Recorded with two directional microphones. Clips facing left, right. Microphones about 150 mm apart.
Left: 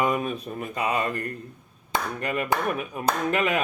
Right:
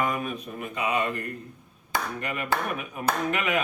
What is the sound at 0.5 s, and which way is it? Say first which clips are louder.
Speech: left 1 dB; 40° left (ahead or behind).